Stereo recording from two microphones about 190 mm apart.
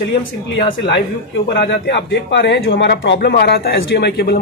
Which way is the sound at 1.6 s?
65° left (ahead or behind).